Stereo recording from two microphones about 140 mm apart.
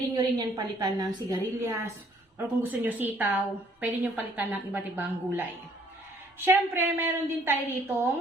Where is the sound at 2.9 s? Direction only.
10° right (ahead or behind).